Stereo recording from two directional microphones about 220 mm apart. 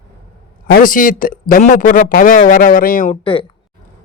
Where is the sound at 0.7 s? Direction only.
40° left (ahead or behind).